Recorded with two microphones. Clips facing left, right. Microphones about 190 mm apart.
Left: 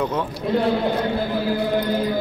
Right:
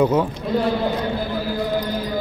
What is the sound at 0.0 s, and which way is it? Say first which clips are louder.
Speech: right 6 dB; 10° right (ahead or behind).